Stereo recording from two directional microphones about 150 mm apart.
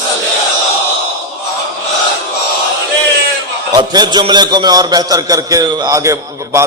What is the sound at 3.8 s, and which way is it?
A man's voice, 30° right (ahead or behind).